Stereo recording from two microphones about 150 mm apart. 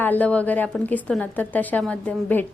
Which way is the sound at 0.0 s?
10° left (ahead or behind).